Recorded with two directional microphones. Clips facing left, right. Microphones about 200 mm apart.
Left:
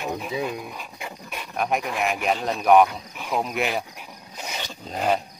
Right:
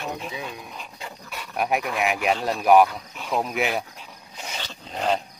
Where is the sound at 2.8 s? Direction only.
15° left (ahead or behind).